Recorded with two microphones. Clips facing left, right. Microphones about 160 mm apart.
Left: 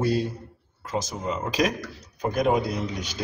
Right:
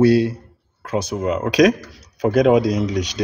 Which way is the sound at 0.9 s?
65° right (ahead or behind).